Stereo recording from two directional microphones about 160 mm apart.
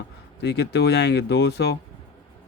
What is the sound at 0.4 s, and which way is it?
Speech, 90° left.